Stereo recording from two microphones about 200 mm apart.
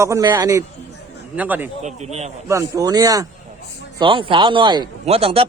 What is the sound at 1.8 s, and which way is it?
Speech, 35° right (ahead or behind).